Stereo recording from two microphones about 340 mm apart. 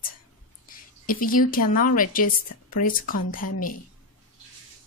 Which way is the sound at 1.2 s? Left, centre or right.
Left.